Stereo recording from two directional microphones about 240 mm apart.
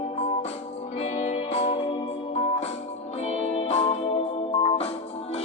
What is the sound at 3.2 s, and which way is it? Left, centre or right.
Music, left.